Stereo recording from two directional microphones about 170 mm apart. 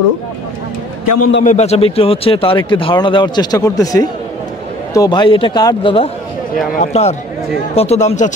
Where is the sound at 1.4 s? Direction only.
40° left (ahead or behind).